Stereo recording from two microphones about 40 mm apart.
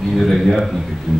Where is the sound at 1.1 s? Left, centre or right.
Right.